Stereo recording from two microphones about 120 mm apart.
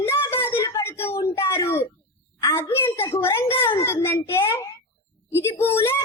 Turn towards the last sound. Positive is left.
turn(degrees=20)  # may be behind; listen again after turning